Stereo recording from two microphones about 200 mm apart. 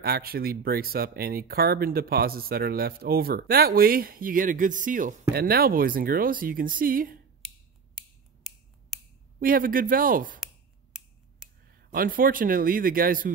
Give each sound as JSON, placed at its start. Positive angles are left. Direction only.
{"t": 0.0, "sound": "speech", "side_deg": -50}
{"t": 9.4, "sound": "speech", "side_deg": -45}
{"t": 11.9, "sound": "speech", "side_deg": -45}